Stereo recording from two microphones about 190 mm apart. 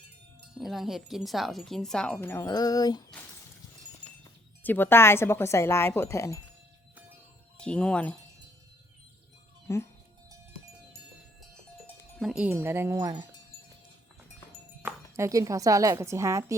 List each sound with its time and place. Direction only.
0.6 s speech: centre (ahead or behind); by 3.0 s 20° left (ahead or behind)
4.2 s speech: 10° left (ahead or behind)
7.6 s speech: 5° left (ahead or behind)
9.7 s speech: 15° left (ahead or behind)
11.9 s sheep: 10° left (ahead or behind)
12.2 s speech: 5° right (ahead or behind)
14.8 s speech: 15° right (ahead or behind)